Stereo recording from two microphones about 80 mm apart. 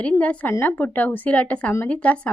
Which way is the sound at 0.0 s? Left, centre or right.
Centre.